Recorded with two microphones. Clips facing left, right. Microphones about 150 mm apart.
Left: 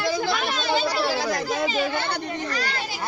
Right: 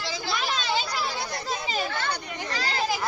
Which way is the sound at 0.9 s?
90° left.